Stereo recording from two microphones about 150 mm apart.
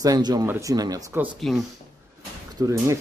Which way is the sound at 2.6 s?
20° right (ahead or behind).